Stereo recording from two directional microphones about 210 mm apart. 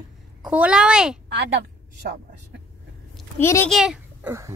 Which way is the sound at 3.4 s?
10° left (ahead or behind).